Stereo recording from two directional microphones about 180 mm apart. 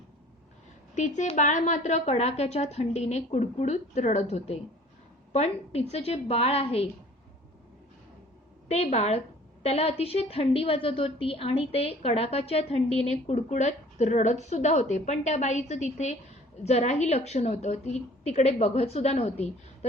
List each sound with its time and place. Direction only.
0.9 s a woman's voice: 45° left (ahead or behind)
8.7 s a woman's voice: 40° left (ahead or behind)